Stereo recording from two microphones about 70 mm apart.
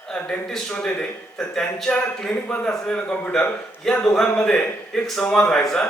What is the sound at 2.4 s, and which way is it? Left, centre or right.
Speech, left.